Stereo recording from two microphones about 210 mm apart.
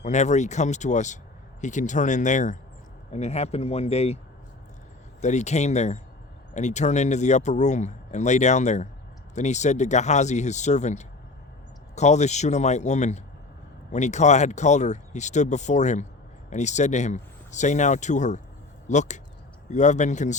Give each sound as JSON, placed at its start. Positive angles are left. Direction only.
{"t": 0.0, "sound": "speech", "side_deg": 35}
{"t": 5.2, "sound": "speech", "side_deg": 35}